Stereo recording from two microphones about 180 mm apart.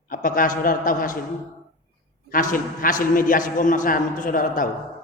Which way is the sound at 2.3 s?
50° left (ahead or behind).